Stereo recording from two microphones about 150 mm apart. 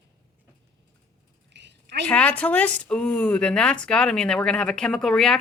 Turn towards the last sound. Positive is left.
turn(degrees=5)  # may be behind; listen again after turning